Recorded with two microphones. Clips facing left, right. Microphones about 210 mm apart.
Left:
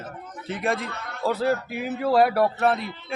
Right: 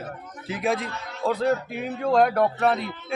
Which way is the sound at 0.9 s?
55° left (ahead or behind).